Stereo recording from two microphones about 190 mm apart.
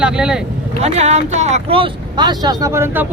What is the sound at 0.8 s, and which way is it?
Speech, 35° right (ahead or behind).